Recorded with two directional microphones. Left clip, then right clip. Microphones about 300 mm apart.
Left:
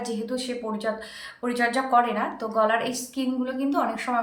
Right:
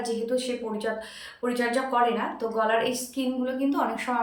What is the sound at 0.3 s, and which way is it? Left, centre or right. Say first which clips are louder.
A woman's voice: right 2 dB; centre.